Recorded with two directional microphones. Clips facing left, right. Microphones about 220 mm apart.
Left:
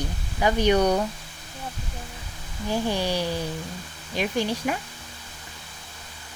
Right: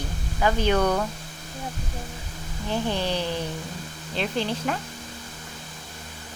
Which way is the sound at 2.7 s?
10° left (ahead or behind).